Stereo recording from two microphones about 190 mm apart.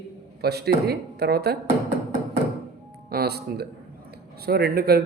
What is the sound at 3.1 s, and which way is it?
Speech, 55° right (ahead or behind).